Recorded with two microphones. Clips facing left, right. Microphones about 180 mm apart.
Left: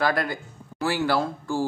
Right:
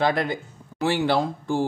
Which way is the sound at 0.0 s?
20° right (ahead or behind).